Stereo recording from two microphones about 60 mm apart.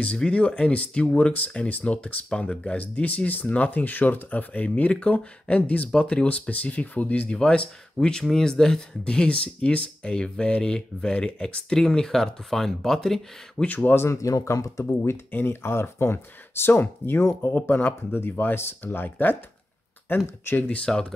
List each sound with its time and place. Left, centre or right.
0.0 s speech: centre
13.7 s speech: left
14.0 s speech: left
14.9 s speech: left
20.6 s speech: centre